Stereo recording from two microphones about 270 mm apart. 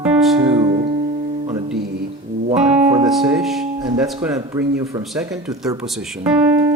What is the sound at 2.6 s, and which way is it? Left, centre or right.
Music, centre.